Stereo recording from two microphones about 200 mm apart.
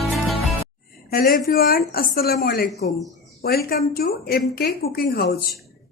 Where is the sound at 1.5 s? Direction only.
50° left (ahead or behind).